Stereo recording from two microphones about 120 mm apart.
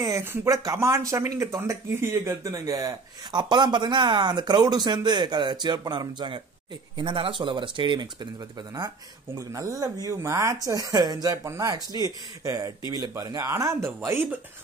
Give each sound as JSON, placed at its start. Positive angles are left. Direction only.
{"t": 0.0, "sound": "speech", "side_deg": -20}